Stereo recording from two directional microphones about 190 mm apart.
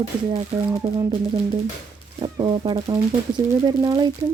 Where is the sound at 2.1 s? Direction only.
25° right (ahead or behind).